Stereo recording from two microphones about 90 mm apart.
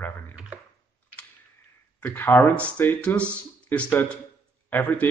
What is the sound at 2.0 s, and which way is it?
Speech, 25° left (ahead or behind).